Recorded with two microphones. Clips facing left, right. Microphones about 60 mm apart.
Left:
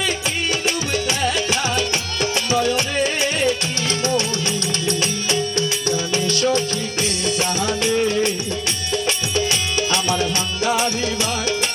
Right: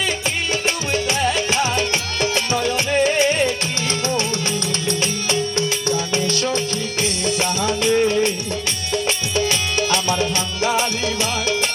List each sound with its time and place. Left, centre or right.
1.5 s music: right
4.9 s music: right